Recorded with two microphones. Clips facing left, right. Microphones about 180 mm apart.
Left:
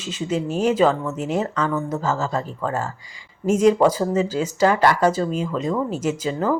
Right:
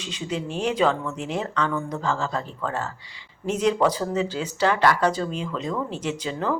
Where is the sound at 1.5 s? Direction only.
5° left (ahead or behind).